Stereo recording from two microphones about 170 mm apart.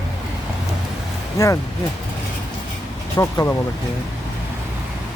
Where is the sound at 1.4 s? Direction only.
20° left (ahead or behind).